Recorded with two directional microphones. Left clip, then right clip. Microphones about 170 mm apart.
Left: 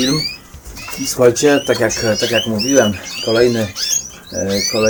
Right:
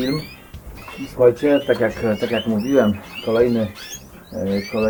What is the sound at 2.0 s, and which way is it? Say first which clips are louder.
Speech: left 5 dB; 5° left (ahead or behind).